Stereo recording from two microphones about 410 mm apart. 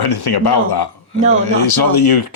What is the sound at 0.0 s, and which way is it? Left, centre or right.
Speech, left.